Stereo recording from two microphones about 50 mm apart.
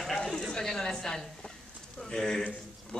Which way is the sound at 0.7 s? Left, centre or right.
Centre.